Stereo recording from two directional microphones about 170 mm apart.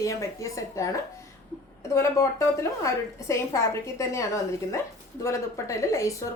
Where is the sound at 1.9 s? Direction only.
15° left (ahead or behind).